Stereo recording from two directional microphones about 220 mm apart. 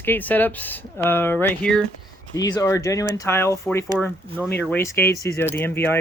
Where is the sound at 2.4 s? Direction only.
15° left (ahead or behind).